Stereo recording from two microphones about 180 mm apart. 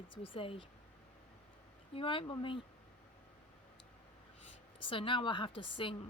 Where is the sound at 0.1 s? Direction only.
30° left (ahead or behind).